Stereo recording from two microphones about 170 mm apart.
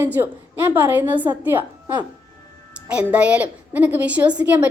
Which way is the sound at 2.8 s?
5° right (ahead or behind).